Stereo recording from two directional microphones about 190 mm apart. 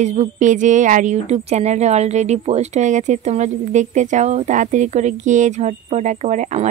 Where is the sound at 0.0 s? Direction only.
40° right (ahead or behind).